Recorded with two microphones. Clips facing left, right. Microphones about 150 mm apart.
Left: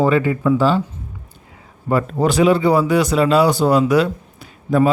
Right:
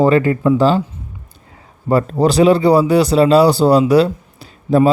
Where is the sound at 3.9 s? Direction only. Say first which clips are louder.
Right 4 dB; 35° right (ahead or behind).